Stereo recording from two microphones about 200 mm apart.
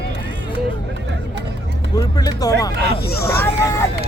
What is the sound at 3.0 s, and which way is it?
Speech, 50° left (ahead or behind).